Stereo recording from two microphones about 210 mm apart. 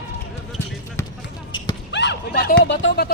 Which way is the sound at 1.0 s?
15° left (ahead or behind).